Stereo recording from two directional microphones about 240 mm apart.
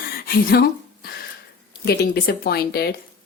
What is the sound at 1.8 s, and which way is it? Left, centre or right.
A woman's voice, left.